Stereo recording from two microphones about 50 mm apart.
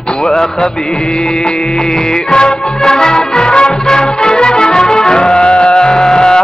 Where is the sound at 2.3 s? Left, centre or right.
Centre.